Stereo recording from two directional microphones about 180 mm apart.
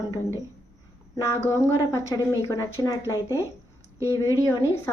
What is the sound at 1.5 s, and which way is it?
Speech, 20° left (ahead or behind).